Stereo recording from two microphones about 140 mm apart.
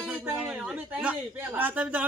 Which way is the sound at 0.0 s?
5° right (ahead or behind).